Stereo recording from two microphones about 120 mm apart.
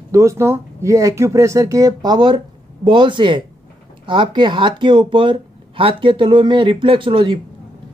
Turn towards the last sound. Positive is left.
turn(degrees=-45)  # may be behind; listen again after turning